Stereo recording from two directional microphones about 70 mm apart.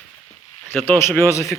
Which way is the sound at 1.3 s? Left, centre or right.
Left.